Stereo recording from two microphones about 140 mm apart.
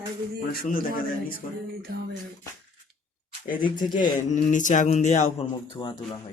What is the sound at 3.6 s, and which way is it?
Speech, 35° left (ahead or behind).